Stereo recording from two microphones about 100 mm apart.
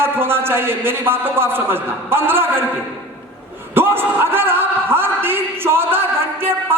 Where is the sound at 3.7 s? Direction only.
25° right (ahead or behind).